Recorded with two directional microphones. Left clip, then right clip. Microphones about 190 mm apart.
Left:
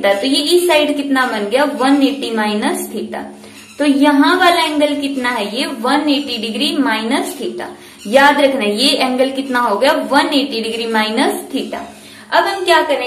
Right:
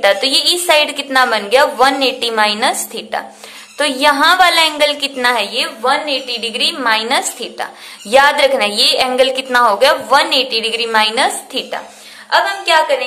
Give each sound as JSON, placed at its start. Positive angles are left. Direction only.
{"t": 0.0, "sound": "a woman's voice", "side_deg": -40}